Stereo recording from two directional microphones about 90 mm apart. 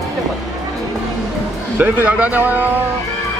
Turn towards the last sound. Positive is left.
turn(degrees=-20)  # may be behind; listen again after turning